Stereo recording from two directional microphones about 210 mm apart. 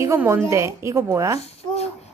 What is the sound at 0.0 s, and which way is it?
A woman's voice, 15° right (ahead or behind).